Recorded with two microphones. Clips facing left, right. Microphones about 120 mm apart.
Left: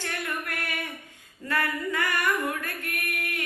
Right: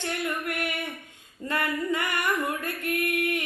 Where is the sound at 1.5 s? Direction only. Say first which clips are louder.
Right 1 dB; 20° right (ahead or behind).